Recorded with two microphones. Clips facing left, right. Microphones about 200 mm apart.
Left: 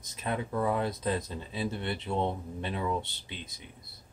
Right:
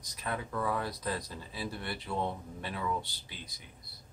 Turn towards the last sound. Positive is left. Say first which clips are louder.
# left 5 dB
turn(degrees=25)  # may be behind; listen again after turning